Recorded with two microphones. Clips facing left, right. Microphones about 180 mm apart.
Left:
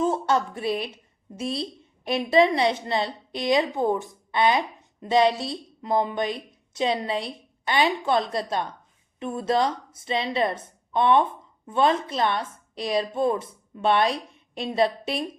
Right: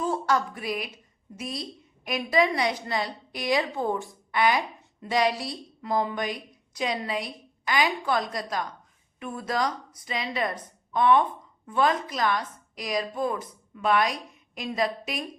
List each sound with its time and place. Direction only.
0.0 s a woman's voice: 25° left (ahead or behind)